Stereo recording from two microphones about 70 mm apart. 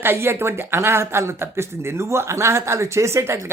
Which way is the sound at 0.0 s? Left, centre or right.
Right.